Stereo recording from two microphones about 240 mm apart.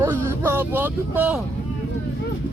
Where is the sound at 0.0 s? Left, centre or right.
Centre.